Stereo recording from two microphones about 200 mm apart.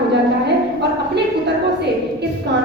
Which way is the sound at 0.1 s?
55° right (ahead or behind).